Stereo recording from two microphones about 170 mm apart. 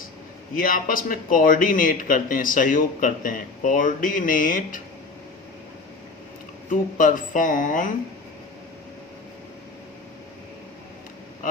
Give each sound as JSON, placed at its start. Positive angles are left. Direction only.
{"t": 0.5, "sound": "a man's voice", "side_deg": 55}
{"t": 6.7, "sound": "a man's voice", "side_deg": 50}